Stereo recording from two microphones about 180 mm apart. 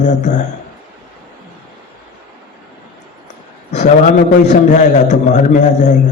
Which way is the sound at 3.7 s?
40° left (ahead or behind).